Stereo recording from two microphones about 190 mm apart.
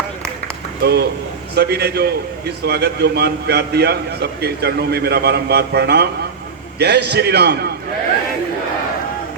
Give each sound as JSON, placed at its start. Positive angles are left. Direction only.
{"t": 0.8, "sound": "a man's voice", "side_deg": -60}